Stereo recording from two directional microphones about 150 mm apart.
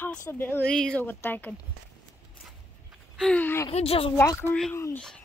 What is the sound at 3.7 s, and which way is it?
Speech, 40° left (ahead or behind).